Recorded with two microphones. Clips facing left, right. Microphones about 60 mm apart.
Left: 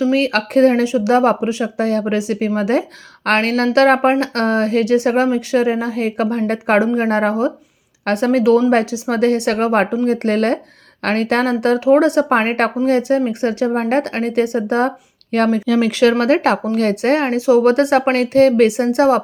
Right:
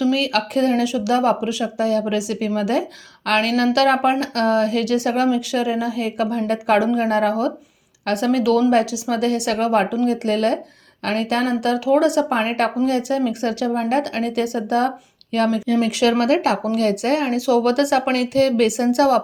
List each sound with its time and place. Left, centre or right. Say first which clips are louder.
0.0 s speech: left 3 dB; left
17.4 s speech: left 6 dB; left